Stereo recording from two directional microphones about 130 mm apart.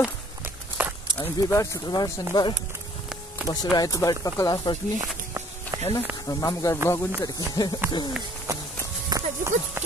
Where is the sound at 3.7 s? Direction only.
25° left (ahead or behind).